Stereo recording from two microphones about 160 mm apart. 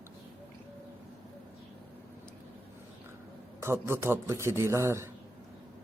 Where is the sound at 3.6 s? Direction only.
15° right (ahead or behind).